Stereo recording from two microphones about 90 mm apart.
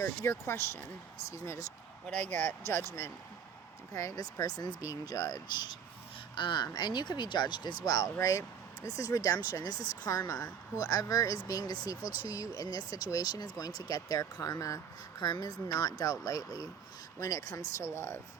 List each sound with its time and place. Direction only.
0.0 s speech: 30° left (ahead or behind)
2.6 s speech: 25° left (ahead or behind)
3.9 s speech: 40° left (ahead or behind)
6.3 s speech: 60° left (ahead or behind)
7.9 s speech: 40° left (ahead or behind); by 18.2 s 25° left (ahead or behind)